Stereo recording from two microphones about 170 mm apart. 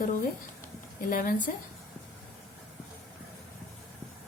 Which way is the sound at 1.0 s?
55° left (ahead or behind).